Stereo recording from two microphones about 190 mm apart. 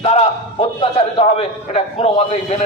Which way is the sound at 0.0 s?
30° left (ahead or behind).